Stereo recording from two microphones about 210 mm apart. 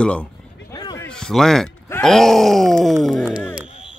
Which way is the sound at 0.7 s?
15° left (ahead or behind).